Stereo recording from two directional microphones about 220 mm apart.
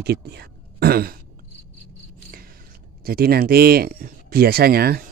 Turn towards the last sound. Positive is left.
turn(degrees=-45)  # may be behind; listen again after turning